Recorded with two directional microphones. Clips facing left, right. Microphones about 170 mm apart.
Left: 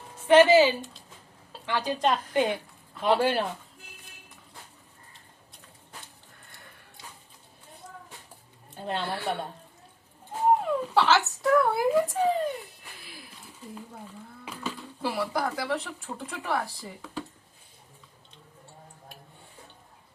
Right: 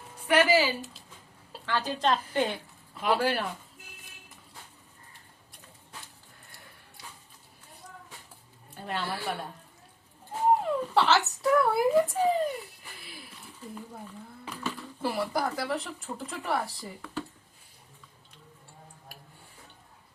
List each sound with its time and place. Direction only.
0.3 s a woman's voice: 25° left (ahead or behind)
3.0 s a woman's voice: 25° left (ahead or behind)
8.8 s a woman's voice: 25° left (ahead or behind)
10.5 s speech: centre (ahead or behind)
14.4 s speech: 5° left (ahead or behind)